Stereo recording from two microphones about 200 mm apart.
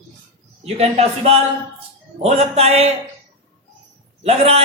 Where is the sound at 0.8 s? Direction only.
30° right (ahead or behind).